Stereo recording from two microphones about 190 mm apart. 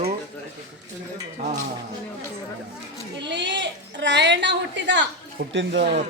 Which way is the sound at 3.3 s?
65° right (ahead or behind).